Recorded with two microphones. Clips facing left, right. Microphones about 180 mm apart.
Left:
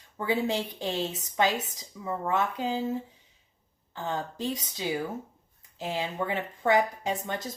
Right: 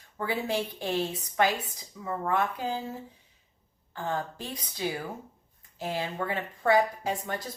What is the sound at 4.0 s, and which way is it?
Speech, 20° left (ahead or behind).